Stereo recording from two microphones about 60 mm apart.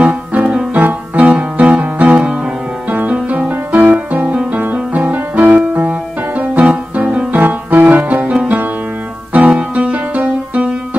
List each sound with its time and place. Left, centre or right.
0.0 s music: right